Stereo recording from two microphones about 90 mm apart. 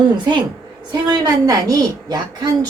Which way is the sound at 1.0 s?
45° right (ahead or behind).